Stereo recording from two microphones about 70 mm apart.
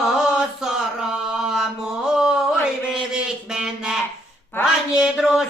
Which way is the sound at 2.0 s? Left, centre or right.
Centre.